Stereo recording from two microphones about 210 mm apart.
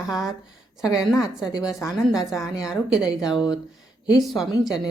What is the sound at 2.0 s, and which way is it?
A woman's voice, centre (ahead or behind).